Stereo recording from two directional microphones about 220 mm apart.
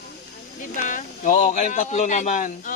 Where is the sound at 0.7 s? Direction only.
35° left (ahead or behind).